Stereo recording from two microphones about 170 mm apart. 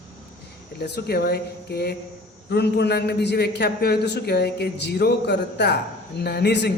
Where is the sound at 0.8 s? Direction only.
65° left (ahead or behind).